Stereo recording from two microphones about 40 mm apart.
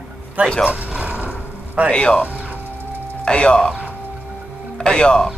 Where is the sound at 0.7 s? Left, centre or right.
Right.